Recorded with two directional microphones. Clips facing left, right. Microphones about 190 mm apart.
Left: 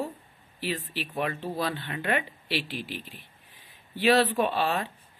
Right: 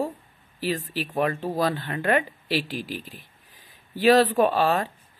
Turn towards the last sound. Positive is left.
turn(degrees=-45)  # may be behind; listen again after turning